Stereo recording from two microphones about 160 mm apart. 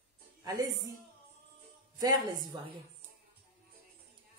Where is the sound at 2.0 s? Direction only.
25° right (ahead or behind).